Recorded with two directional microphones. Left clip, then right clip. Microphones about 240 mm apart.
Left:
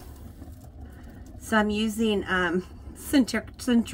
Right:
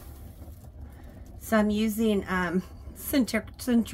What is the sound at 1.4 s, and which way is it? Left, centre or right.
A woman's voice, right.